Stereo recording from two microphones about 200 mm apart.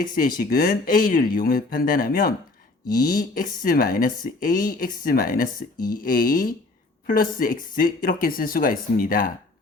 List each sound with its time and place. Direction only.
0.0 s speech: 45° left (ahead or behind)